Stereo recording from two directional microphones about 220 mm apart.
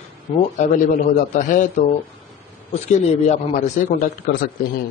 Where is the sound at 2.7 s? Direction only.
30° left (ahead or behind).